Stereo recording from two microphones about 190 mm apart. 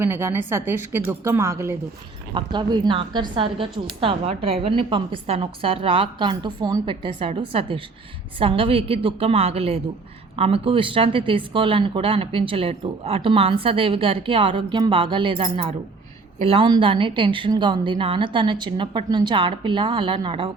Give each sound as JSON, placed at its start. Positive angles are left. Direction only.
{"t": 0.0, "sound": "a woman's voice", "side_deg": -15}